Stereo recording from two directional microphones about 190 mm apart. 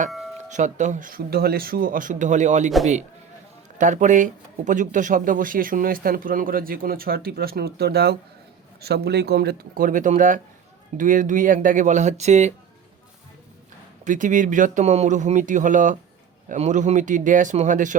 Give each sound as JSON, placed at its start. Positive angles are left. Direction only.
{"t": 0.1, "sound": "music", "side_deg": 0}
{"t": 0.5, "sound": "speech", "side_deg": -40}
{"t": 3.8, "sound": "speech", "side_deg": -40}
{"t": 14.0, "sound": "speech", "side_deg": -40}